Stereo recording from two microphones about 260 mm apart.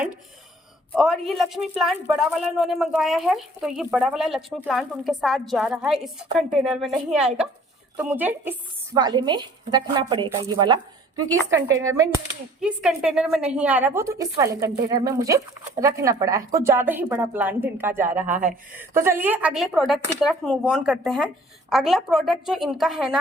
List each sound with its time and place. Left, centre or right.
0.9 s a woman's voice: centre
18.3 s speech: right
18.8 s speech: centre